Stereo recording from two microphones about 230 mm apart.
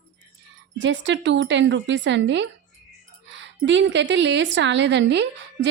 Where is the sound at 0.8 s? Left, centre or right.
Right.